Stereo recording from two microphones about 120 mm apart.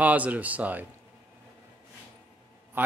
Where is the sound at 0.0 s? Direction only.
10° right (ahead or behind).